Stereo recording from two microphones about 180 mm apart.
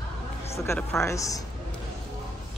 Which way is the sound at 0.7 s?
15° left (ahead or behind).